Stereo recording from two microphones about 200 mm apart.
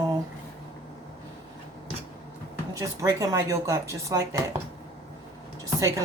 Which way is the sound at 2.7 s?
15° right (ahead or behind).